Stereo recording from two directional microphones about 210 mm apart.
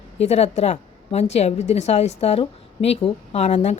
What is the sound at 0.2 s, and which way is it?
Speech, 30° left (ahead or behind).